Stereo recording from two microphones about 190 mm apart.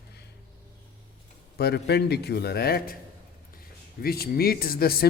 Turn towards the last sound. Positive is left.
turn(degrees=50)  # may be behind; listen again after turning